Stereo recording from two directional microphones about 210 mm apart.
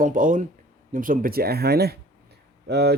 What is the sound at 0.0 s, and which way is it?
Speech, 40° right (ahead or behind).